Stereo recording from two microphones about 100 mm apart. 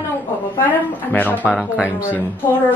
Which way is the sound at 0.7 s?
15° left (ahead or behind).